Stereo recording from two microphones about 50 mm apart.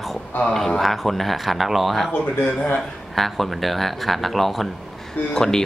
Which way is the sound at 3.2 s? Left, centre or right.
Centre.